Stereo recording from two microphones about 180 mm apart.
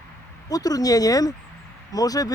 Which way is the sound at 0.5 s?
20° left (ahead or behind).